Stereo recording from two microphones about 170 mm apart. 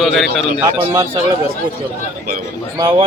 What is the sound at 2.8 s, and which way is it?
Speech, 25° right (ahead or behind).